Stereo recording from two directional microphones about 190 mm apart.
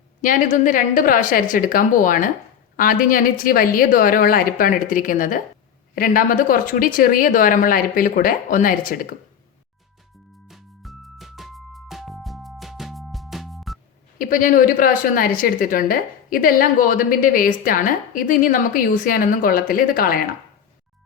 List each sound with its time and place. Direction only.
0.2 s a woman's voice: 45° left (ahead or behind)
10.5 s music: centre (ahead or behind)
14.2 s a woman's voice: 45° left (ahead or behind)